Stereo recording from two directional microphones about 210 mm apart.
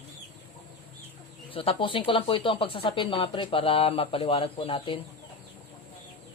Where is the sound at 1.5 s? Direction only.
25° left (ahead or behind).